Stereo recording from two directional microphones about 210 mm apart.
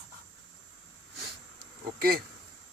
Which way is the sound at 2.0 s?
45° right (ahead or behind).